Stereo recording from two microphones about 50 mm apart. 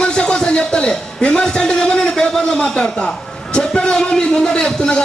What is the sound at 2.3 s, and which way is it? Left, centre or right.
A man's voice, centre.